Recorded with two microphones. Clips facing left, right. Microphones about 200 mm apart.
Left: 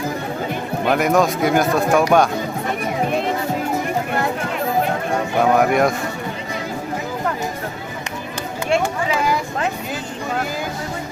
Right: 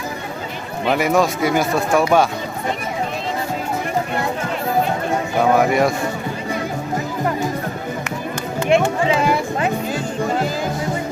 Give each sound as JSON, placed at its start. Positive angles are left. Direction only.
{"t": 0.9, "sound": "speech", "side_deg": 0}
{"t": 5.5, "sound": "speech", "side_deg": 0}
{"t": 8.7, "sound": "a sound", "side_deg": -25}